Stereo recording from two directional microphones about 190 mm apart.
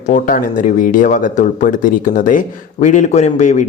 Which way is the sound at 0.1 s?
45° left (ahead or behind).